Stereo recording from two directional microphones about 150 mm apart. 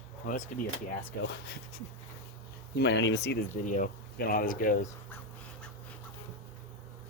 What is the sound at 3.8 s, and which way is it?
Speech, 75° left (ahead or behind).